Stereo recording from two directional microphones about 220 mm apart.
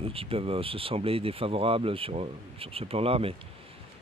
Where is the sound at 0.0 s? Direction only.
25° right (ahead or behind).